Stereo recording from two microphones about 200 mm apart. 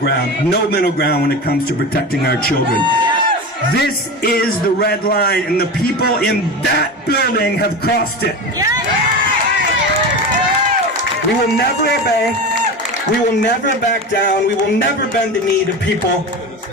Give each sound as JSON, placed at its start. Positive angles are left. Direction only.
{"t": 0.5, "sound": "speech", "side_deg": 50}
{"t": 3.8, "sound": "speech", "side_deg": 50}